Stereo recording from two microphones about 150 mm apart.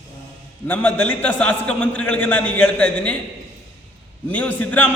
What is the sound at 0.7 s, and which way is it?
A man's voice, 10° left (ahead or behind).